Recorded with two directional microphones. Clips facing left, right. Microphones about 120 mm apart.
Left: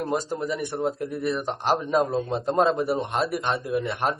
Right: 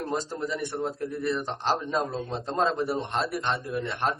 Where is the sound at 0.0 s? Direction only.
10° left (ahead or behind).